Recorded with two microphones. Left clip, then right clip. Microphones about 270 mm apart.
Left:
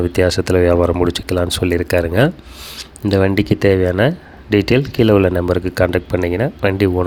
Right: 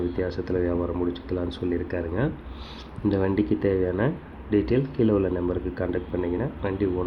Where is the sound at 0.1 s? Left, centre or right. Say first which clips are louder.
Left 13 dB; left.